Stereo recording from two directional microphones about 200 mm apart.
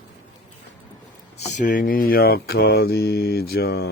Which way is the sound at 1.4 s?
40° left (ahead or behind).